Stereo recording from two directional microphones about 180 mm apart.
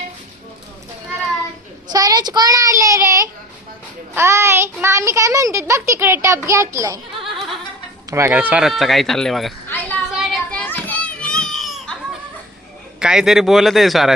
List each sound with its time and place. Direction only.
1.9 s child singing: 20° right (ahead or behind)
4.1 s a child's voice: 15° right (ahead or behind)
7.3 s a sound: centre (ahead or behind)
8.1 s speech: 10° right (ahead or behind)
9.6 s a sound: 10° left (ahead or behind)
10.2 s children playing: 5° left (ahead or behind)
13.0 s speech: 5° right (ahead or behind)